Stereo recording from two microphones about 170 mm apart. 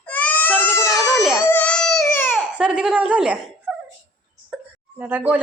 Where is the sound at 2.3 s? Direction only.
5° right (ahead or behind).